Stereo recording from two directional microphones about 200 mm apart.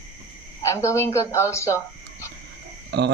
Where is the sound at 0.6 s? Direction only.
15° left (ahead or behind).